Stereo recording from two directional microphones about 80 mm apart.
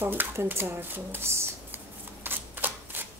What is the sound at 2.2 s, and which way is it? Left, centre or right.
Typewriter, right.